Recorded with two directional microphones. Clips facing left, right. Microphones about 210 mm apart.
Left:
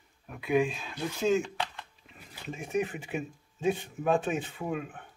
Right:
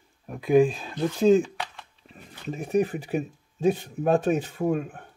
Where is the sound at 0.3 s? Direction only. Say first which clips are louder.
Right 8 dB; 35° right (ahead or behind).